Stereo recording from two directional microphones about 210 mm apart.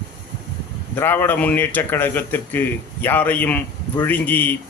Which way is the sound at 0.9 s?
10° left (ahead or behind).